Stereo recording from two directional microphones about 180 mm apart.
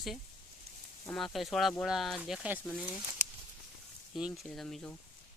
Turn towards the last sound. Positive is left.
turn(degrees=5)  # may be behind; listen again after turning